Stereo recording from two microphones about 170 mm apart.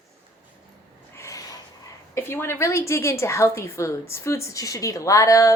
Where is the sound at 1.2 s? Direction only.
20° left (ahead or behind).